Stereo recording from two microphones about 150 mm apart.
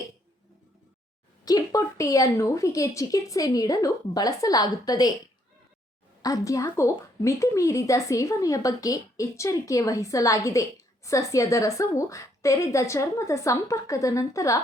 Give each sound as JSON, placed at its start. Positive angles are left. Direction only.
{"t": 1.5, "sound": "speech", "side_deg": 20}
{"t": 6.2, "sound": "speech", "side_deg": 20}